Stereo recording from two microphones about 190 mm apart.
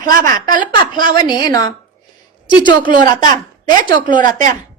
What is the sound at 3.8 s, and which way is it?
Speech, 45° right (ahead or behind).